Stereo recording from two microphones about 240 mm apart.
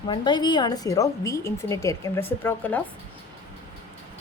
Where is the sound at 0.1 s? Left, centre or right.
Centre.